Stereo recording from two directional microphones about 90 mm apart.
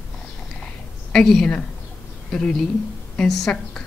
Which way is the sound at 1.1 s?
5° left (ahead or behind).